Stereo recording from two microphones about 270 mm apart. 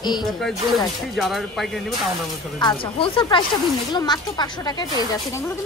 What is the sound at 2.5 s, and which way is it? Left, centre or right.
Speech, centre.